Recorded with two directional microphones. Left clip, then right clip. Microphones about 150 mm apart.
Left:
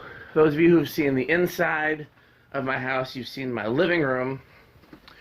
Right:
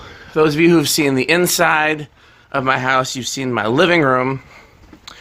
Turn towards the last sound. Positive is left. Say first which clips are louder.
# right 10 dB
turn(degrees=-55)  # may be behind; listen again after turning